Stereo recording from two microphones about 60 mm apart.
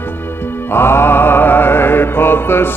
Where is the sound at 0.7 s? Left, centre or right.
Left.